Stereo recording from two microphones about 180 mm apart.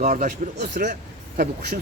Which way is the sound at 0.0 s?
45° right (ahead or behind).